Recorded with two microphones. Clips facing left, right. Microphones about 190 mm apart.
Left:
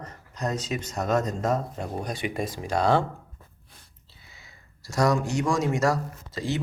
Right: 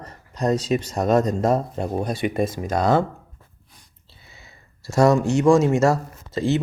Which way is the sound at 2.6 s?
45° right (ahead or behind).